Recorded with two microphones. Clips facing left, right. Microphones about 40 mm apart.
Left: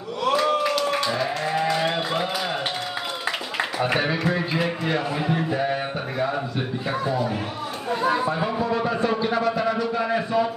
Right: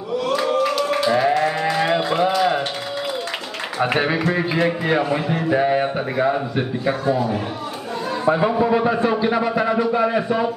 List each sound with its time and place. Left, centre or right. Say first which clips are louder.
0.4 s a sound: right 3 dB; centre
3.8 s a man's voice: right 5 dB; centre
8.3 s a man's voice: right 7 dB; centre